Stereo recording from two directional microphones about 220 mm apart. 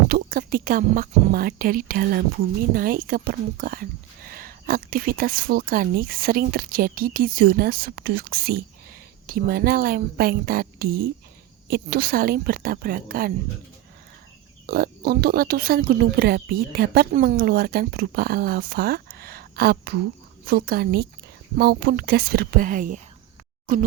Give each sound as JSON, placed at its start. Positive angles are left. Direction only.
{"t": 0.1, "sound": "speech", "side_deg": -40}
{"t": 14.7, "sound": "speech", "side_deg": -45}